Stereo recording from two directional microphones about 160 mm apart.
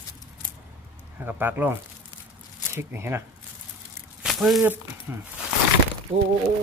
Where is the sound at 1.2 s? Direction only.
10° right (ahead or behind).